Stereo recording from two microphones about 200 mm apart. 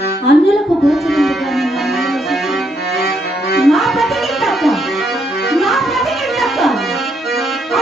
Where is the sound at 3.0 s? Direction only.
55° left (ahead or behind).